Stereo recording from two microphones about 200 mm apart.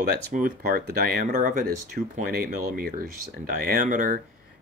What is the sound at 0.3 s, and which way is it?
Speech, 45° right (ahead or behind).